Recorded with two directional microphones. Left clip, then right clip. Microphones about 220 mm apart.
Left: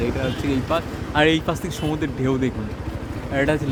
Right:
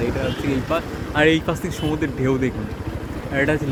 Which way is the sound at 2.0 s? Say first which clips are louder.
Right 2 dB; 10° left (ahead or behind).